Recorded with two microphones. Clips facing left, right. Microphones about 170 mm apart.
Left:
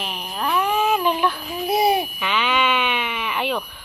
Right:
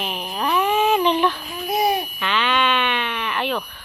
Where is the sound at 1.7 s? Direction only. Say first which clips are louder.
Left 2 dB; 5° left (ahead or behind).